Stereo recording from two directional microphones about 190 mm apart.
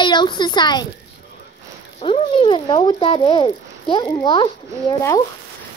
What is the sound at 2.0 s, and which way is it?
Speech, 30° left (ahead or behind).